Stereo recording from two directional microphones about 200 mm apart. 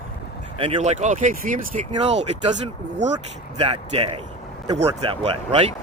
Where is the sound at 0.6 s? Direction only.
30° right (ahead or behind).